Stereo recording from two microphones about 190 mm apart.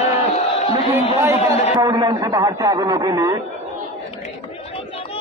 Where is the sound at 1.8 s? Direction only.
20° right (ahead or behind).